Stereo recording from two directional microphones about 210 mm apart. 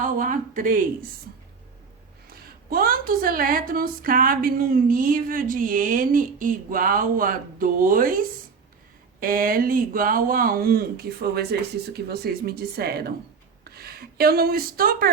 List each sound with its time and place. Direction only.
0.0 s a woman's voice: 40° right (ahead or behind)
2.6 s a woman's voice: 45° right (ahead or behind)
9.2 s speech: 40° right (ahead or behind)